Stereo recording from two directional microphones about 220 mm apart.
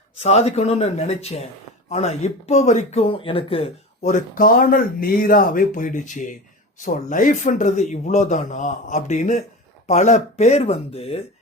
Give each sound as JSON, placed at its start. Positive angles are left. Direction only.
{"t": 0.2, "sound": "speech", "side_deg": 30}